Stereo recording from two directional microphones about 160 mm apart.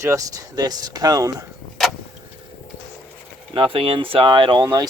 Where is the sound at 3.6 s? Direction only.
35° right (ahead or behind).